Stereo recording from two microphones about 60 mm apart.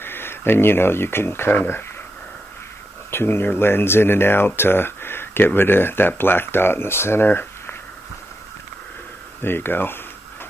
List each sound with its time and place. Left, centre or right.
0.0 s speech: left
3.1 s speech: left
9.4 s speech: left